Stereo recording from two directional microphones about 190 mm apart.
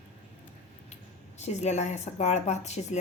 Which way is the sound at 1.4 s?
35° left (ahead or behind).